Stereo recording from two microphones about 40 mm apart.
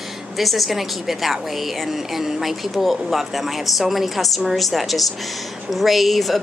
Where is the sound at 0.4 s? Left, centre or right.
Centre.